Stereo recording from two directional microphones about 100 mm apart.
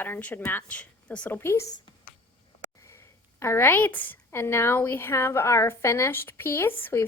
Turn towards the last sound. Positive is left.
turn(degrees=25)  # may be behind; listen again after turning